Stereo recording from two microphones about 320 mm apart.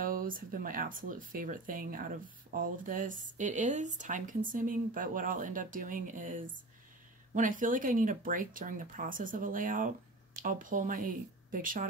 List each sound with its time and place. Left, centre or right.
0.0 s speech: right